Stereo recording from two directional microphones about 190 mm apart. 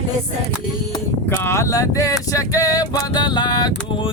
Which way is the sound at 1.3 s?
15° left (ahead or behind).